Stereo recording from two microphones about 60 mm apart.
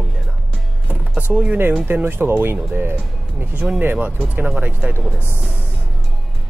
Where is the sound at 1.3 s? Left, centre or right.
Centre.